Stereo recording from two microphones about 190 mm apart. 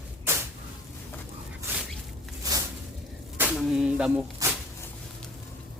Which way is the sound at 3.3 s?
5° right (ahead or behind).